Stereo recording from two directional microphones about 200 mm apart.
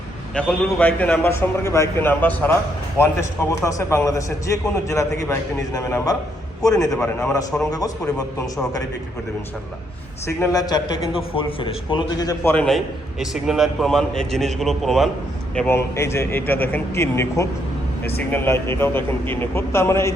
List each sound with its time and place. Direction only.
0.3 s a man's voice: 10° left (ahead or behind)
7.0 s a man's voice: 5° left (ahead or behind)
7.3 s a man's voice: 15° left (ahead or behind)
10.2 s a man's voice: 15° left (ahead or behind); by 15.1 s centre (ahead or behind)
15.5 s a man's voice: 10° left (ahead or behind)